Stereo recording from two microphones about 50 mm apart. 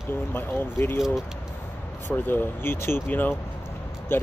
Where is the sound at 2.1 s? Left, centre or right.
Left.